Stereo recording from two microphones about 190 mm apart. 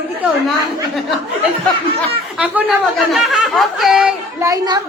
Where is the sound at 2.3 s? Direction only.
5° right (ahead or behind).